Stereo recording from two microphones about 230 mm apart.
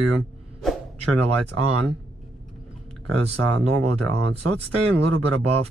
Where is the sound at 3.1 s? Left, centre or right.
Right.